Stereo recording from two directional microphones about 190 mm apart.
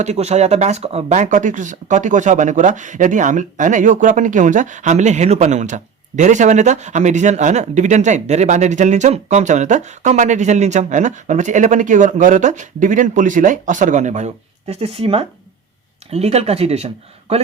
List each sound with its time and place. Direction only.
0.0 s speech: 35° right (ahead or behind)